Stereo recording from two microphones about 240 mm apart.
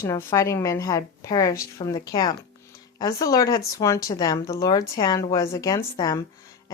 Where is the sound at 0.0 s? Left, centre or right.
Centre.